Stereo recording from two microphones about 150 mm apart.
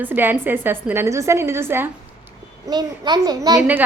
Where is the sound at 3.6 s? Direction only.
10° right (ahead or behind).